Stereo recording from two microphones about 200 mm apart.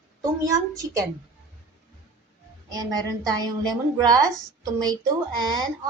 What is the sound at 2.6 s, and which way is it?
A woman's voice, 20° right (ahead or behind).